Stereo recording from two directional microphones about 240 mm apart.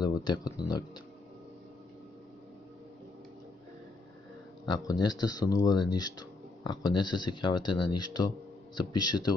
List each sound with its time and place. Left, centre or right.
0.0 s speech: centre
4.7 s speech: centre